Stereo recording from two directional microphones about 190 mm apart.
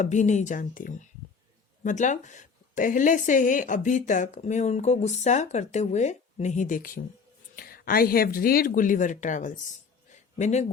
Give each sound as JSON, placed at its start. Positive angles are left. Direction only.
{"t": 0.0, "sound": "speech", "side_deg": 40}